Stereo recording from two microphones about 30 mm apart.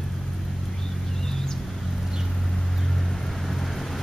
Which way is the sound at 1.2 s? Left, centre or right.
Centre.